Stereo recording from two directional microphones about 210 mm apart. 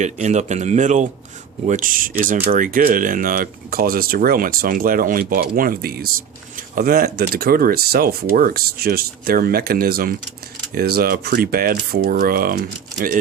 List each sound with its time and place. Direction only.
0.0 s speech: 35° right (ahead or behind)